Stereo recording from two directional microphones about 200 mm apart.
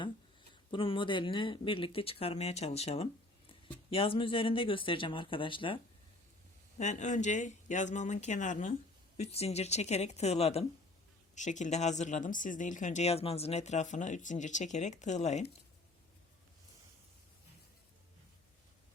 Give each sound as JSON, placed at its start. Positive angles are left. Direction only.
{"t": 0.7, "sound": "speech", "side_deg": 25}
{"t": 6.7, "sound": "speech", "side_deg": 35}